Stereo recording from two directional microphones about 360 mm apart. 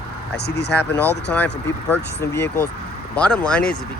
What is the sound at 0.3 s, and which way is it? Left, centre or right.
Speech, left.